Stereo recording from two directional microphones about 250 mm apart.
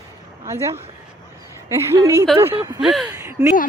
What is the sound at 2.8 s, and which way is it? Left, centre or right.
Speech, centre.